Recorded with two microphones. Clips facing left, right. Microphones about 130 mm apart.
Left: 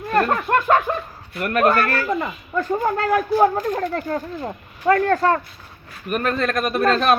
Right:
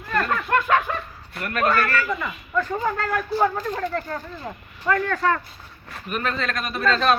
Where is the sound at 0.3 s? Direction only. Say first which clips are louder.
Left 3 dB; 35° left (ahead or behind).